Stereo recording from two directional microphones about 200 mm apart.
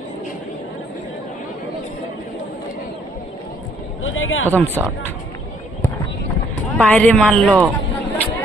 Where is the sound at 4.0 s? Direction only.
80° left.